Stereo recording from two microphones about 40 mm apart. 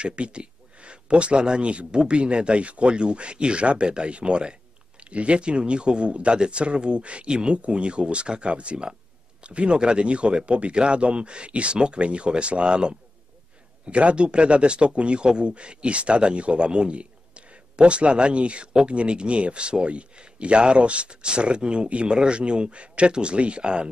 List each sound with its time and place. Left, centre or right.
0.0 s speech: right